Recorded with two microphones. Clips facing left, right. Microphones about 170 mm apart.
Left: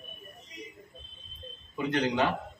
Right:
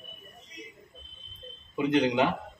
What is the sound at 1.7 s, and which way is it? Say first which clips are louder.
Speech: right 4 dB; 20° right (ahead or behind).